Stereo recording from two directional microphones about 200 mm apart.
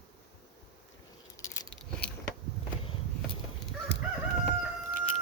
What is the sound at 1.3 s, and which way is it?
Keys jangling, 15° left (ahead or behind).